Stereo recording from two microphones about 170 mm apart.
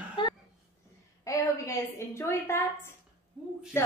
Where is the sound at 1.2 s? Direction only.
15° left (ahead or behind).